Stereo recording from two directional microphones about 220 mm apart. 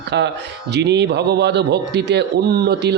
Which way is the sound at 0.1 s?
50° right (ahead or behind).